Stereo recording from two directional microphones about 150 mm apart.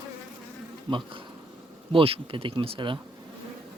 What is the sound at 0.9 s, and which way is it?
Speech, 35° right (ahead or behind).